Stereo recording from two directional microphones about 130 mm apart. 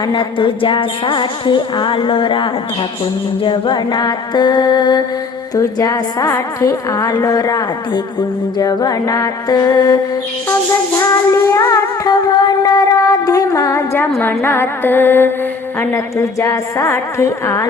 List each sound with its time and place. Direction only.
0.1 s a woman's voice: 40° left (ahead or behind)
10.9 s music: 25° left (ahead or behind)
15.8 s a woman's voice: 20° left (ahead or behind)